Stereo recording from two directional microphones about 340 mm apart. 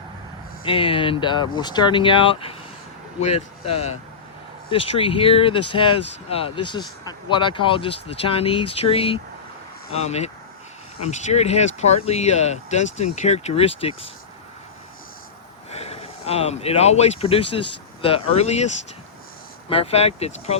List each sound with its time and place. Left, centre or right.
0.6 s speech: centre
15.7 s speech: centre
19.7 s speech: centre